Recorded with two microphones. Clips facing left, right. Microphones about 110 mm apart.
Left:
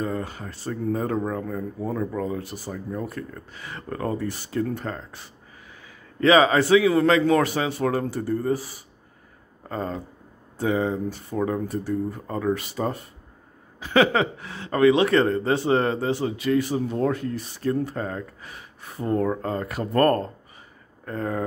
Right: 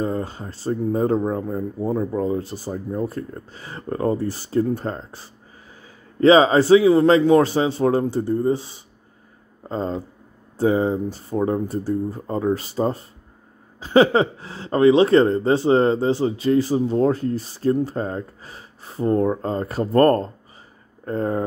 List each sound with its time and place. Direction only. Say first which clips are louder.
0.0 s a man's voice: right 4 dB; 30° right (ahead or behind)